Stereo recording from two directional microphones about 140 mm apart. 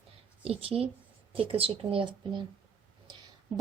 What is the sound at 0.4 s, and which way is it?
A woman's voice, 45° right (ahead or behind).